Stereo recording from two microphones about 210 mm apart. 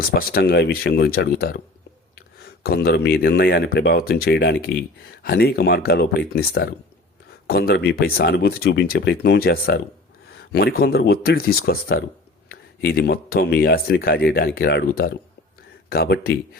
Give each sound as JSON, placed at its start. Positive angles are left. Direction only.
{"t": 0.0, "sound": "speech", "side_deg": 45}